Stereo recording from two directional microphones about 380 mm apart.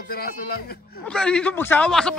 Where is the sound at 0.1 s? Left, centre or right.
Left.